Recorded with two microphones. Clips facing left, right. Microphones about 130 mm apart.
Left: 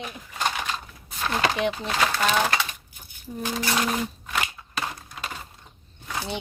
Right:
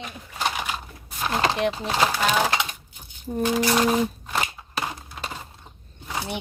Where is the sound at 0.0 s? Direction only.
Centre (ahead or behind).